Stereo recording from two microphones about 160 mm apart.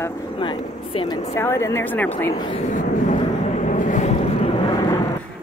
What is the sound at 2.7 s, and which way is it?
Vehicle, 50° left (ahead or behind).